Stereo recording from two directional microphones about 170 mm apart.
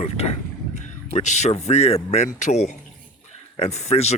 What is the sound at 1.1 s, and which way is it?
A man's voice, 40° left (ahead or behind).